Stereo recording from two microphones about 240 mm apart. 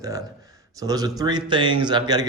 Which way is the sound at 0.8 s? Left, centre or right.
Centre.